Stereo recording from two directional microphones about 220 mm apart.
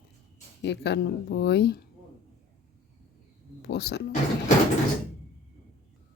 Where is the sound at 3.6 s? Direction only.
50° left (ahead or behind).